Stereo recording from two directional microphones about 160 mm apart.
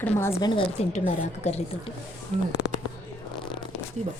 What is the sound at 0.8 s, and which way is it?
Speech, 45° left (ahead or behind).